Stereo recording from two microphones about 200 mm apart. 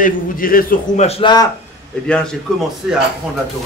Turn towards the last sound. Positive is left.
turn(degrees=0)  # may be behind; listen again after turning